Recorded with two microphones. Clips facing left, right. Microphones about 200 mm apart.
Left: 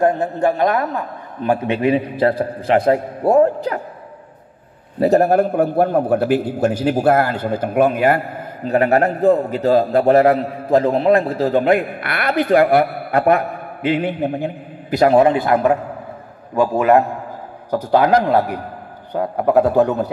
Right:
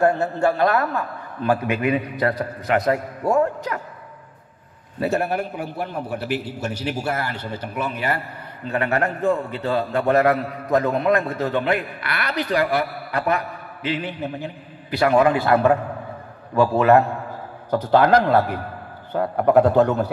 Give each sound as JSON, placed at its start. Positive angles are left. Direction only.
{"t": 0.0, "sound": "a man's voice", "side_deg": 20}
{"t": 5.0, "sound": "a man's voice", "side_deg": 40}
{"t": 15.3, "sound": "a man's voice", "side_deg": 15}